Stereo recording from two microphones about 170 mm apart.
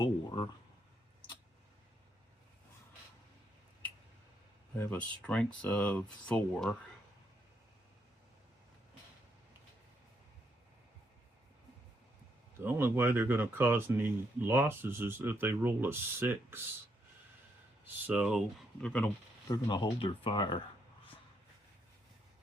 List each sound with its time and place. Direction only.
0.0 s speech: 25° left (ahead or behind)
4.8 s speech: 10° left (ahead or behind)
12.5 s speech: 15° right (ahead or behind)
17.8 s speech: 10° right (ahead or behind); by 19.1 s 5° left (ahead or behind)
19.5 s speech: 25° left (ahead or behind)